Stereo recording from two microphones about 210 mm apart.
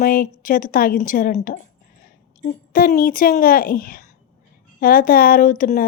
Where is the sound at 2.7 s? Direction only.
45° left (ahead or behind).